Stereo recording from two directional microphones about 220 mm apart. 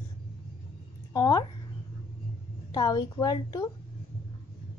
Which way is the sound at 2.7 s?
20° left (ahead or behind).